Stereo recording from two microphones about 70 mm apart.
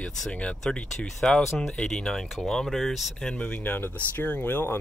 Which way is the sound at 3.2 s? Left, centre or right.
Centre.